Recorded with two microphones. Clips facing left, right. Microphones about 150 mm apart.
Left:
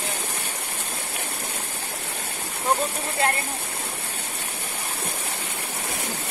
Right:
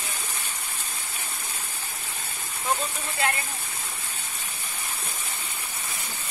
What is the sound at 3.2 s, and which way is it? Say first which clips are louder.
Speech: left 3 dB; 40° left (ahead or behind).